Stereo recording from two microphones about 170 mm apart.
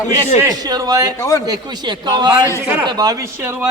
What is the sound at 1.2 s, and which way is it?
Speech, 15° left (ahead or behind).